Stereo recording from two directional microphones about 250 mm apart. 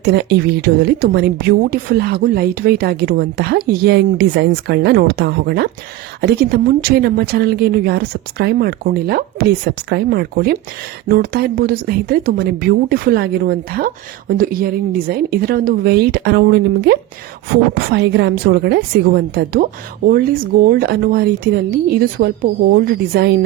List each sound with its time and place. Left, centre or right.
0.0 s a woman's voice: right
20.7 s a woman's voice: right